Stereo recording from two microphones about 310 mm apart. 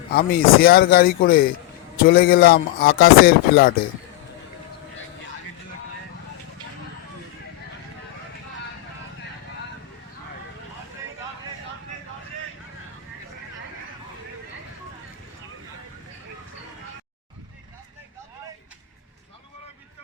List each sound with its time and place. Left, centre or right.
0.1 s speech: left